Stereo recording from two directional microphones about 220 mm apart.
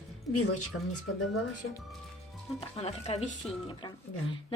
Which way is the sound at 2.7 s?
30° left (ahead or behind).